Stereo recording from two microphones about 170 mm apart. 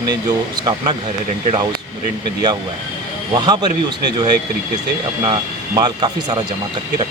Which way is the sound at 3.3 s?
25° right (ahead or behind).